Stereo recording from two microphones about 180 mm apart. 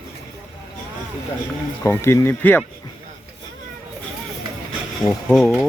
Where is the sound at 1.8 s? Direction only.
15° left (ahead or behind).